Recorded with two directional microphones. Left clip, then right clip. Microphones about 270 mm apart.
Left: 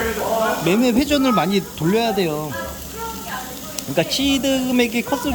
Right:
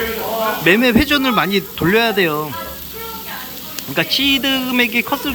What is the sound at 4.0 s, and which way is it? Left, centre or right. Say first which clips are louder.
Speech: right 4 dB; centre.